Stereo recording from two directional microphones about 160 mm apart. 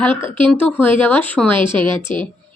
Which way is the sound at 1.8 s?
30° right (ahead or behind).